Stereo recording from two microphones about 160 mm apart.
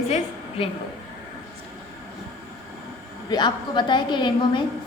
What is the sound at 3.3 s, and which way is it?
A woman's voice, 30° left (ahead or behind).